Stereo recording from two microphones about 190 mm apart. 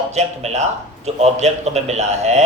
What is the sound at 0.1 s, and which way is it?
A man's voice, 35° right (ahead or behind).